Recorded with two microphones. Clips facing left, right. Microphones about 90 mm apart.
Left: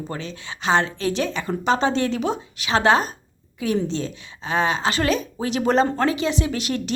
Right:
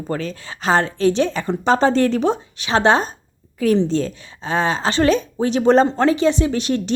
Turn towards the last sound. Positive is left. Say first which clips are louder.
# right 5 dB
turn(degrees=-35)  # may be behind; listen again after turning